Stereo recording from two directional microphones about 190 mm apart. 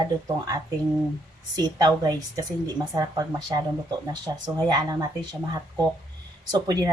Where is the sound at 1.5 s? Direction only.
20° right (ahead or behind).